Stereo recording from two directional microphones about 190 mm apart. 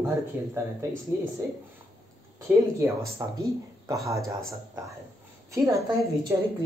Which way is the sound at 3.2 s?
15° right (ahead or behind).